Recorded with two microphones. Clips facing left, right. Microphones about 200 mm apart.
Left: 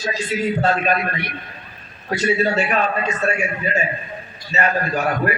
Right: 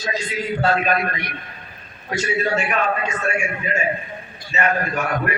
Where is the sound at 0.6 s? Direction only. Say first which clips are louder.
Even; 35° left (ahead or behind).